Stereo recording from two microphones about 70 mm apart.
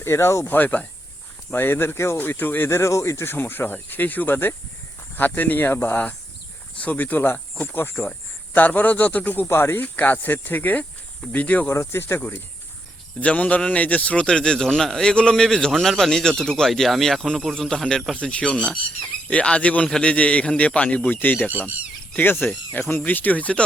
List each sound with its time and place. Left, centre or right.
0.0 s speech: left
0.4 s speech: left
2.6 s speech: left
6.7 s speech: left
9.5 s speech: left
9.8 s speech: left
11.7 s speech: left
13.1 s a man's voice: left